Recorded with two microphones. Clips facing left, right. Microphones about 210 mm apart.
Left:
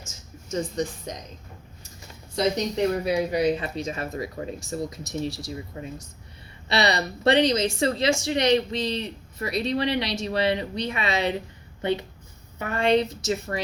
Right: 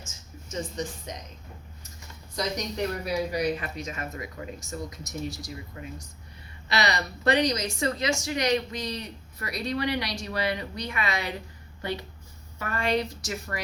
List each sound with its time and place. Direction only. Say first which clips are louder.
2.3 s a woman's voice: left 7 dB; 25° left (ahead or behind)